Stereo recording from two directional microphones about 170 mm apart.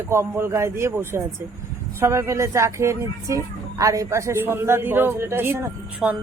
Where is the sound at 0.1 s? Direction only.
15° right (ahead or behind).